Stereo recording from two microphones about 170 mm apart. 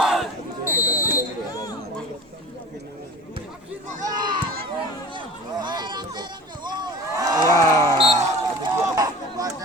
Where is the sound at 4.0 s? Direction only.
25° right (ahead or behind).